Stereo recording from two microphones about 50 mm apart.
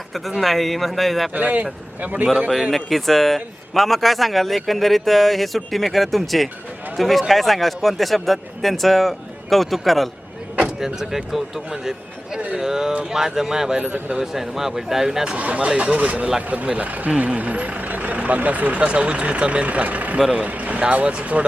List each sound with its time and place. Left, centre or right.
0.1 s speech: centre
1.3 s speech: right
2.5 s speech: centre
15.4 s speech: right
16.0 s speech: right